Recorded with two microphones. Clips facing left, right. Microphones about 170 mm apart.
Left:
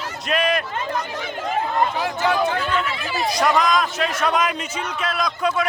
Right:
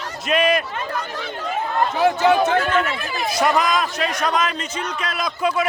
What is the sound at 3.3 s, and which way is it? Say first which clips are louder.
A man's voice: even; 5° right (ahead or behind).